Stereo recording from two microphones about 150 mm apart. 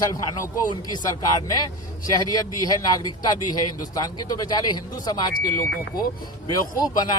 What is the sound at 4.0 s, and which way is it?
Speech, 25° left (ahead or behind).